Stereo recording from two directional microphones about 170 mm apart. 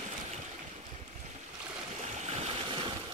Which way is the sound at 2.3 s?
40° right (ahead or behind).